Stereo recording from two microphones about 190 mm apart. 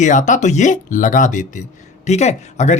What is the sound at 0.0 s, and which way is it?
Speech, 40° left (ahead or behind).